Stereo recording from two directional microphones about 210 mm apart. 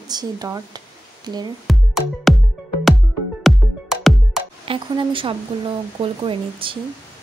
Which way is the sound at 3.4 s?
Centre (ahead or behind).